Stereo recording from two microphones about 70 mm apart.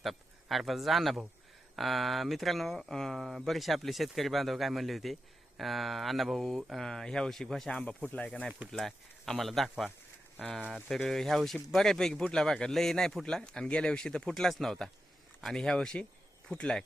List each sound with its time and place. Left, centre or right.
0.0 s a sound: centre
1.7 s speech: centre
7.7 s speech: centre
10.3 s speech: centre